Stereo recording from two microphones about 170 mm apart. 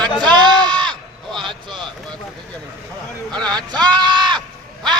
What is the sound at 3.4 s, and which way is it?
Speech, 25° right (ahead or behind).